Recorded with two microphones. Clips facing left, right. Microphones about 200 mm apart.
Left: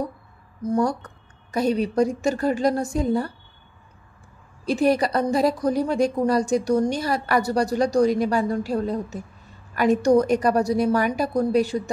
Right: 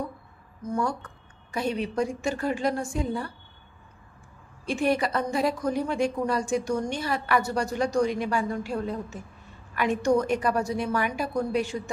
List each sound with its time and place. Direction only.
0.6 s a woman's voice: 35° left (ahead or behind)
4.6 s a woman's voice: 35° left (ahead or behind)